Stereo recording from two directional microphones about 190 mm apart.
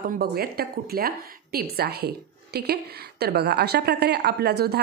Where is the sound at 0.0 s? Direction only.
55° right (ahead or behind).